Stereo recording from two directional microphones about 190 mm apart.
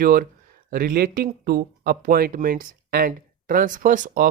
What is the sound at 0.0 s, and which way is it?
Speech, 50° right (ahead or behind).